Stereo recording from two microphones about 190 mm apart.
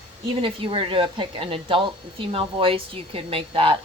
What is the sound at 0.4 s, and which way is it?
A woman's voice, 30° right (ahead or behind).